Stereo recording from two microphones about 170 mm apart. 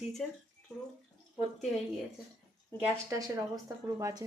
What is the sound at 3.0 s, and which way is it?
A woman's voice, 20° right (ahead or behind).